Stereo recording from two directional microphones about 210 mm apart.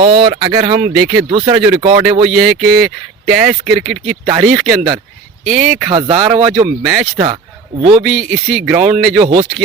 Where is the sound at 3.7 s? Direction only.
Centre (ahead or behind).